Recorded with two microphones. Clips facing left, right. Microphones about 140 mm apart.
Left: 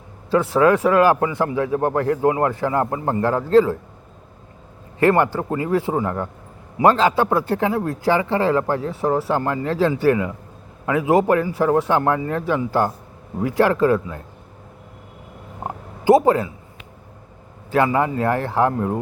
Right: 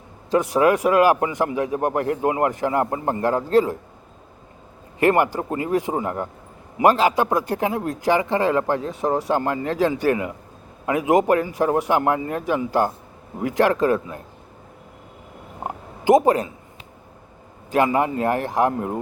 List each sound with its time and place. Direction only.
0.3 s a man's voice: 15° right (ahead or behind)
4.9 s a man's voice: 15° right (ahead or behind)
15.6 s a sound: 15° right (ahead or behind)
17.9 s a man's voice: 20° right (ahead or behind)